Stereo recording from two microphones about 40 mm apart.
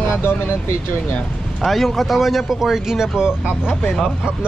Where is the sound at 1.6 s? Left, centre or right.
Centre.